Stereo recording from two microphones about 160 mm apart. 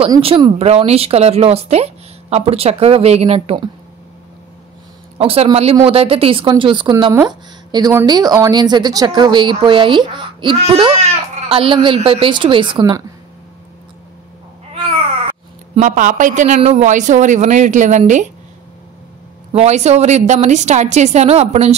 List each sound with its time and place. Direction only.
0.2 s speech: 35° right (ahead or behind)
5.2 s a woman's voice: 35° right (ahead or behind)
11.0 s speech: 40° right (ahead or behind)
15.7 s speech: 50° right (ahead or behind)
19.5 s speech: 40° right (ahead or behind)